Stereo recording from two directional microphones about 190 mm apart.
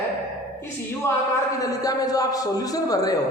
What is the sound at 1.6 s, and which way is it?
A man's voice, 20° left (ahead or behind).